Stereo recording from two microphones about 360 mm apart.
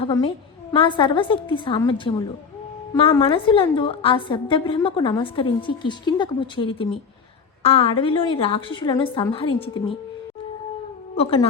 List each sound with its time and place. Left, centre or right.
0.0 s a woman's voice: centre
11.2 s a woman's voice: centre